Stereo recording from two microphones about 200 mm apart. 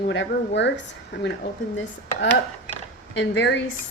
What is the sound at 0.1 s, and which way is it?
Speech, 65° left (ahead or behind).